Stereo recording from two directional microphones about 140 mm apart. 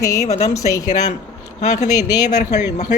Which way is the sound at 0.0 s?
25° left (ahead or behind).